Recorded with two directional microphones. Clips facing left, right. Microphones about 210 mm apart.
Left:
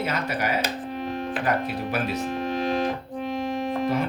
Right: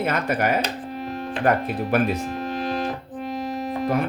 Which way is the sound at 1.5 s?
55° right (ahead or behind).